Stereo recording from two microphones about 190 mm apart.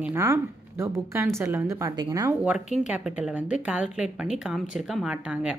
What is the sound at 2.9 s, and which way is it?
Speech, 5° right (ahead or behind).